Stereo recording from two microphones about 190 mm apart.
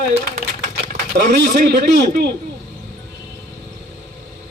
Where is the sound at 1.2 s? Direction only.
65° right (ahead or behind).